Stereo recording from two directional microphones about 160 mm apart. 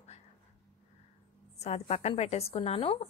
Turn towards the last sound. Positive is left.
turn(degrees=35)  # may be behind; listen again after turning